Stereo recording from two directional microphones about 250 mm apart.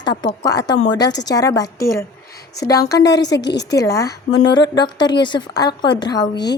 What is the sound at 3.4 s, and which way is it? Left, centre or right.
Speech, left.